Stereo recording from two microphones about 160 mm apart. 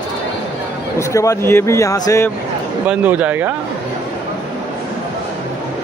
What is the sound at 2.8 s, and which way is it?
Speech, 10° right (ahead or behind).